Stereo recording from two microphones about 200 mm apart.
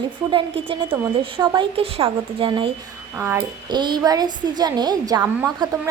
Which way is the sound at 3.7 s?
20° right (ahead or behind).